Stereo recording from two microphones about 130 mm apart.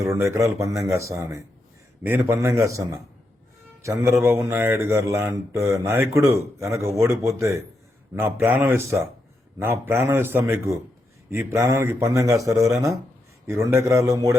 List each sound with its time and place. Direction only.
0.0 s speech: 20° right (ahead or behind)